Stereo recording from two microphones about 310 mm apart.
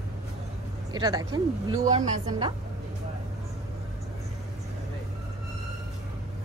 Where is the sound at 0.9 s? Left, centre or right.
Centre.